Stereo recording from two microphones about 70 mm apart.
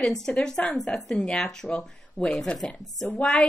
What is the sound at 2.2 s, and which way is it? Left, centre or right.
Speech, centre.